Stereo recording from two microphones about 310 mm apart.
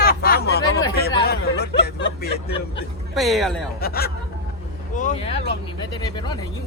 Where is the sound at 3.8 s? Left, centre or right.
Left; by 6.4 s centre.